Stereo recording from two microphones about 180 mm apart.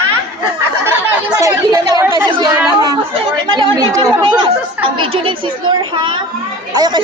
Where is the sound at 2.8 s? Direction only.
25° right (ahead or behind).